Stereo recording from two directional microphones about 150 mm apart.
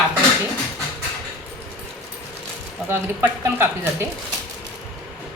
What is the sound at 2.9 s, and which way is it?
Speech, 15° right (ahead or behind).